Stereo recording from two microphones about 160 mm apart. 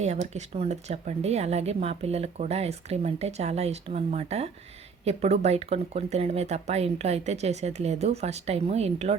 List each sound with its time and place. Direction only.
0.0 s speech: 45° right (ahead or behind)